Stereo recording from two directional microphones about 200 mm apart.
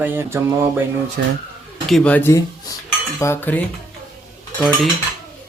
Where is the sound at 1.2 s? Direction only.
50° right (ahead or behind).